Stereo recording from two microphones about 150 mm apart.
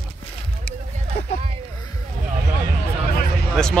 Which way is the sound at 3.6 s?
5° left (ahead or behind).